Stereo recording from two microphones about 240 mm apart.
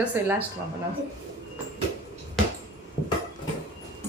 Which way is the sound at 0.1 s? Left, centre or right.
Centre.